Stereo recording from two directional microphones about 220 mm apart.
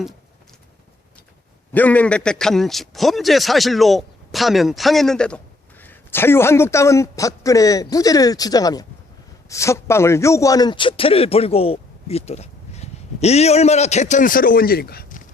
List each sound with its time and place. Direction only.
1.7 s a man's voice: 5° left (ahead or behind); by 15.2 s 45° left (ahead or behind)